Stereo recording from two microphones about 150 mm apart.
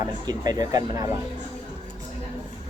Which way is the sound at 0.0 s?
25° right (ahead or behind).